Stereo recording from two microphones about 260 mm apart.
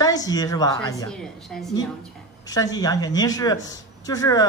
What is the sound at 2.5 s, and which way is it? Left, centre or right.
A man's voice, centre.